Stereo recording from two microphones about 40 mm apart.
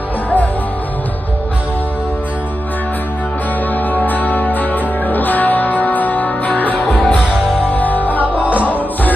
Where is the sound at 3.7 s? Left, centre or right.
Left.